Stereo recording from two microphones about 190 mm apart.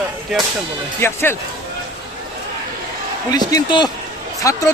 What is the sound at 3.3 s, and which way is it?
Speech, 20° left (ahead or behind).